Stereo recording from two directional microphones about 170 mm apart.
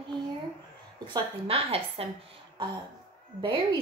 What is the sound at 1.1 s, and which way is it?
Speech, 35° right (ahead or behind).